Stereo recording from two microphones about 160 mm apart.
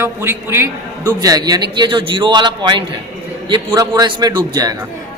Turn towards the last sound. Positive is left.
turn(degrees=-25)  # may be behind; listen again after turning